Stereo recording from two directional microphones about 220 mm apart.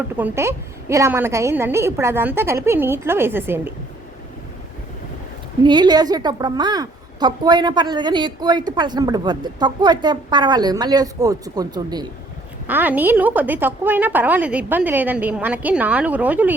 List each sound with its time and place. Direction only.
0.2 s a woman's voice: 10° right (ahead or behind)
5.6 s a woman's voice: 20° right (ahead or behind)
12.6 s a woman's voice: 10° right (ahead or behind)